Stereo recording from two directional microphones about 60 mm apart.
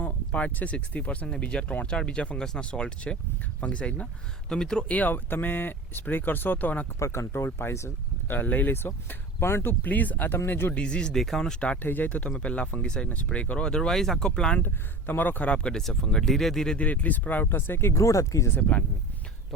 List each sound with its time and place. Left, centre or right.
0.0 s speech: left
4.9 s speech: left
7.0 s speech: left
8.3 s speech: left
9.8 s speech: left
10.8 s speech: centre
11.8 s speech: left; by 14.6 s centre
14.6 s speech: left
15.4 s speech: centre
16.7 s speech: left
17.9 s speech: left